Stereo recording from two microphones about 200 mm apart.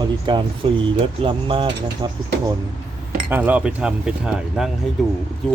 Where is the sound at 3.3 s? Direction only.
10° right (ahead or behind).